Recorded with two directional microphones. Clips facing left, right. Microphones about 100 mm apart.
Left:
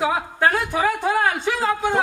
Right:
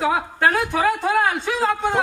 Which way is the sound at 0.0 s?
Centre (ahead or behind).